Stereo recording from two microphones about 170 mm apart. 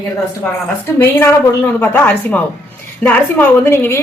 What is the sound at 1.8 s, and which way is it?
A woman's voice, 10° left (ahead or behind).